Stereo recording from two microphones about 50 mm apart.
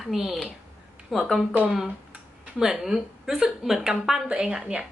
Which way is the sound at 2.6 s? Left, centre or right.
Centre.